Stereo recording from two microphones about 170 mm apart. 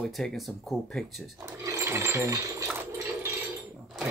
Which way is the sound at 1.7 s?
15° right (ahead or behind).